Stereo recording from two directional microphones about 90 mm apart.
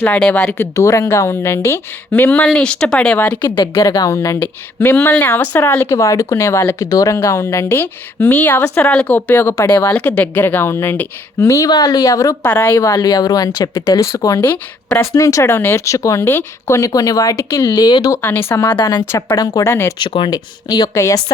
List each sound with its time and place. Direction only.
0.0 s speech: 10° left (ahead or behind)
0.5 s speech: 30° left (ahead or behind)
2.5 s speech: 10° left (ahead or behind)
3.8 s speech: 40° left (ahead or behind)
4.4 s speech: 25° left (ahead or behind)
11.7 s speech: 45° left (ahead or behind)
12.4 s speech: 20° left (ahead or behind)
12.8 s speech: 45° left (ahead or behind)
14.4 s speech: 20° left (ahead or behind)
15.1 s speech: 35° left (ahead or behind)
17.7 s speech: 45° left (ahead or behind)
18.2 s speech: 25° left (ahead or behind)
20.0 s speech: 65° left (ahead or behind)
20.3 s speech: 45° left (ahead or behind)